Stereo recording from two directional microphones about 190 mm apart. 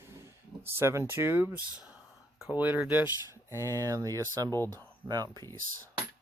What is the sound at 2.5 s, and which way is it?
Speech, 10° right (ahead or behind).